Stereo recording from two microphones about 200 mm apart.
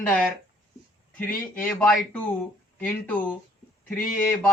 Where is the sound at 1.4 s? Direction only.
10° left (ahead or behind).